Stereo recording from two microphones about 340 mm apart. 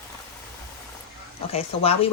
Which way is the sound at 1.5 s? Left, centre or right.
Centre.